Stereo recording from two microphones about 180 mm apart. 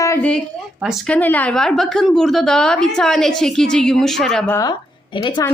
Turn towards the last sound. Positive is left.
turn(degrees=25)  # may be behind; listen again after turning